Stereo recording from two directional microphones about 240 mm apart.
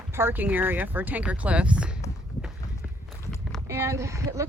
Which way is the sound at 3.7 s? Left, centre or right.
Centre.